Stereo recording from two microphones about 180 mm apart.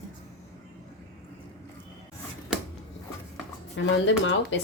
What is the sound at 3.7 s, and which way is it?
Speech, 80° left.